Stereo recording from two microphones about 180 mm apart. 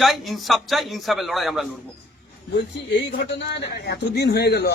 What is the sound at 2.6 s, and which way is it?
Speech, 75° left (ahead or behind).